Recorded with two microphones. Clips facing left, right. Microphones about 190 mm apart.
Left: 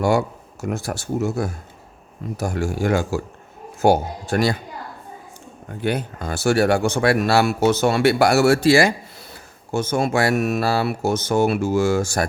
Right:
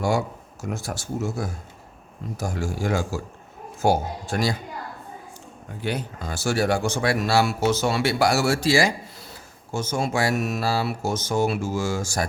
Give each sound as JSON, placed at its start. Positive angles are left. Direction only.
{"t": 0.0, "sound": "speech", "side_deg": 65}
{"t": 5.8, "sound": "speech", "side_deg": 55}